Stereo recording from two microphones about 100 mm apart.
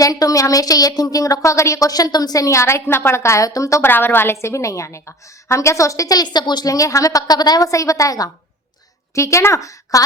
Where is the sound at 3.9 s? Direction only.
20° left (ahead or behind).